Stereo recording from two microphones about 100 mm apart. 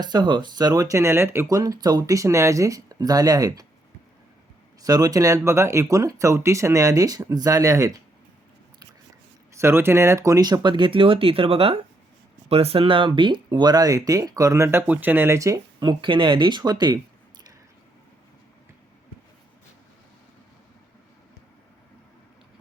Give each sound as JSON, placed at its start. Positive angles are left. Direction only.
{"t": 0.0, "sound": "speech", "side_deg": -45}
{"t": 4.8, "sound": "speech", "side_deg": -40}
{"t": 9.6, "sound": "speech", "side_deg": -25}
{"t": 12.5, "sound": "speech", "side_deg": -80}
{"t": 15.4, "sound": "speech", "side_deg": -35}
{"t": 15.8, "sound": "speech", "side_deg": -50}